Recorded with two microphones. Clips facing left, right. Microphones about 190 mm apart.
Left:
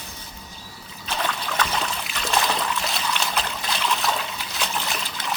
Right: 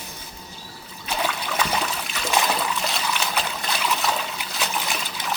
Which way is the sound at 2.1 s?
5° right (ahead or behind).